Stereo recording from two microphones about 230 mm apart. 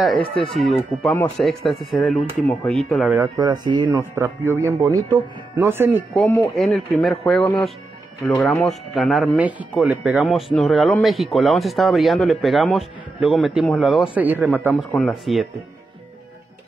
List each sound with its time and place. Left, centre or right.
0.5 s speech: centre
3.2 s speech: centre
6.1 s speech: centre
15.0 s speech: centre